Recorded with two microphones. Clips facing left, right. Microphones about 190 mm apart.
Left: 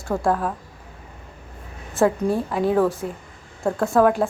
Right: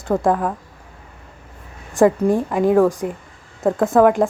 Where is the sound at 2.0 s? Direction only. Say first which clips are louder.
Right 5 dB; 15° right (ahead or behind).